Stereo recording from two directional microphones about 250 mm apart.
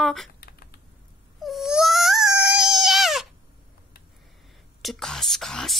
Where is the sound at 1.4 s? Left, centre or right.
Centre.